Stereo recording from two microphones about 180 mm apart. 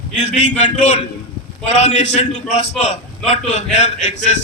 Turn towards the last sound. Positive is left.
turn(degrees=40)  # may be behind; listen again after turning